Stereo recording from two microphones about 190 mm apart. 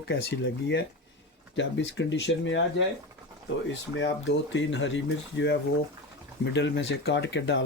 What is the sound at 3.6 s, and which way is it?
Speech, 75° left (ahead or behind).